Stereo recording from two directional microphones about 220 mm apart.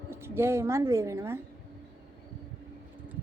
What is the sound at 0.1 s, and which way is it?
A woman's voice, 10° right (ahead or behind).